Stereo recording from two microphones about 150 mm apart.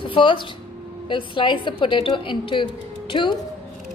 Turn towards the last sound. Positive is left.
turn(degrees=30)  # may be behind; listen again after turning